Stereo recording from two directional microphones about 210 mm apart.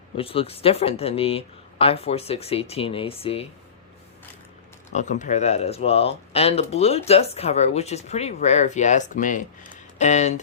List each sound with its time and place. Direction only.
0.2 s speech: 25° left (ahead or behind)
4.9 s speech: 35° left (ahead or behind)